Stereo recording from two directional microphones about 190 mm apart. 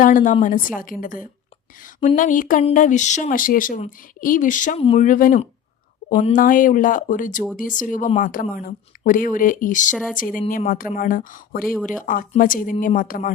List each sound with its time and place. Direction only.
0.0 s a woman's voice: 40° left (ahead or behind)
4.8 s speech: 30° left (ahead or behind)
5.0 s a woman's voice: 45° left (ahead or behind)
9.9 s speech: centre (ahead or behind)
10.2 s a woman's voice: 45° left (ahead or behind)